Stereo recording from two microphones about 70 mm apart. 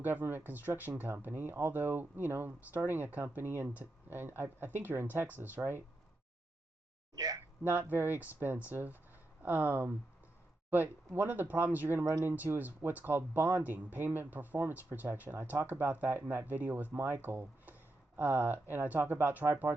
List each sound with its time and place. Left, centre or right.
0.0 s speech: right
7.2 s speech: right
7.7 s speech: right